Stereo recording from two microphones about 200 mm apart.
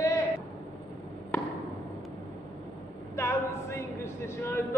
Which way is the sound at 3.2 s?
15° left (ahead or behind).